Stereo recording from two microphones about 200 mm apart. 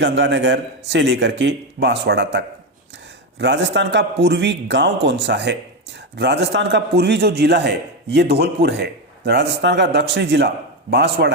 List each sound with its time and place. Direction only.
0.0 s a man's voice: 60° right (ahead or behind)